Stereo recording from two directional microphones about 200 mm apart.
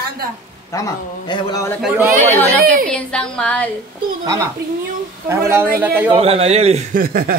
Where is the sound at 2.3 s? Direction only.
10° left (ahead or behind).